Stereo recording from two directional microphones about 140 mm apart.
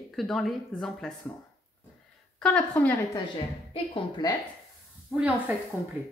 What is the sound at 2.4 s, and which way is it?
Speech, 10° left (ahead or behind).